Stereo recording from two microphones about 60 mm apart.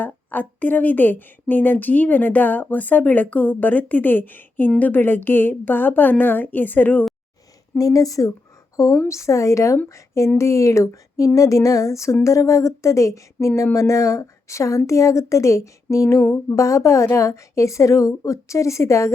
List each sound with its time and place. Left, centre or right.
0.0 s a woman's voice: left
7.8 s a woman's voice: left